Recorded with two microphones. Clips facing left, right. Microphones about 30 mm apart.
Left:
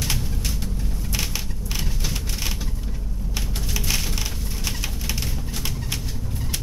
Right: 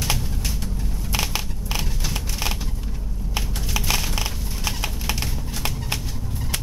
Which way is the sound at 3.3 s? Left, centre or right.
Right.